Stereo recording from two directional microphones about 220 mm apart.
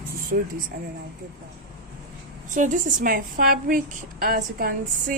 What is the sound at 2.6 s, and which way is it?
A woman's voice, 35° right (ahead or behind).